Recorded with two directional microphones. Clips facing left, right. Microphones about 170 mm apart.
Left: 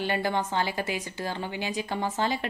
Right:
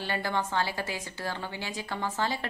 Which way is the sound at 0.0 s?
15° left (ahead or behind).